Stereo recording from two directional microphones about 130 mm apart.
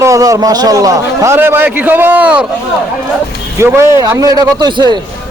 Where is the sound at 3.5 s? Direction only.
20° right (ahead or behind).